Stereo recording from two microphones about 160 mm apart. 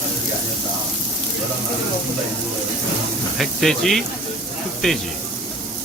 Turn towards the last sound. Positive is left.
turn(degrees=5)  # may be behind; listen again after turning